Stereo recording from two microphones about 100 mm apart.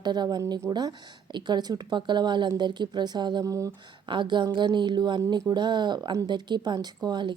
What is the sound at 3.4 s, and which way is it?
Speech, 30° right (ahead or behind).